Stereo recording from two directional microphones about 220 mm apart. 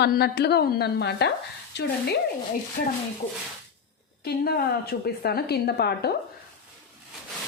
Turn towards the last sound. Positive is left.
turn(degrees=45)  # may be behind; listen again after turning